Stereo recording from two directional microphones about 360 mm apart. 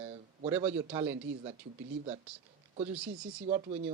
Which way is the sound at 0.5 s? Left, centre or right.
Centre.